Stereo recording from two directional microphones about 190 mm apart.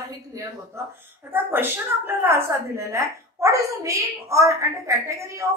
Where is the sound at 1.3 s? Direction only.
10° right (ahead or behind).